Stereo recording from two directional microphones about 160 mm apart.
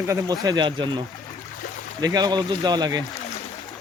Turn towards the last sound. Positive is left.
turn(degrees=-25)  # may be behind; listen again after turning